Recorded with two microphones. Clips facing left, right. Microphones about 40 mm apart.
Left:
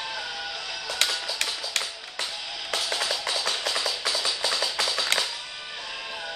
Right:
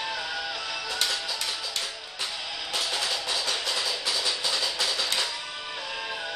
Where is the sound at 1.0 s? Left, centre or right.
Left.